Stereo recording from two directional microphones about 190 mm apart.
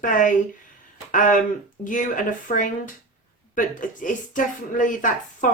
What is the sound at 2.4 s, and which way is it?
Speech, 45° left (ahead or behind).